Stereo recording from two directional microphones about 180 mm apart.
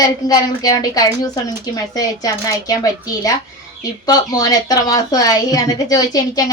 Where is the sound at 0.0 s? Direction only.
20° left (ahead or behind).